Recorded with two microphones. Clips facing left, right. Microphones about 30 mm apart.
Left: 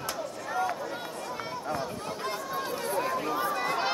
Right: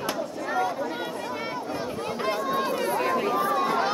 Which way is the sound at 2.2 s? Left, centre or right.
Right.